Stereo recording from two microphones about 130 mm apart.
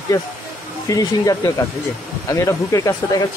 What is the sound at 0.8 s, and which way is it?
Speech, 25° left (ahead or behind).